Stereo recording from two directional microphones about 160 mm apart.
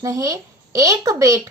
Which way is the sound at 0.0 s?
20° right (ahead or behind).